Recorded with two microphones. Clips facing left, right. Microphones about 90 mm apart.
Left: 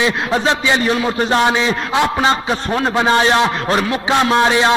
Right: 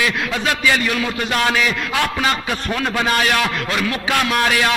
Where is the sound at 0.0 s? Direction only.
25° left (ahead or behind).